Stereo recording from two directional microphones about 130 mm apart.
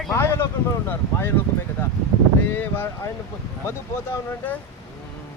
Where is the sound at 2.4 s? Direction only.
15° left (ahead or behind).